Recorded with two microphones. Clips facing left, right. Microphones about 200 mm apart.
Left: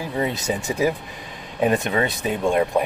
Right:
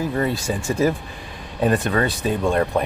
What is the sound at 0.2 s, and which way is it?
Speech, 20° left (ahead or behind).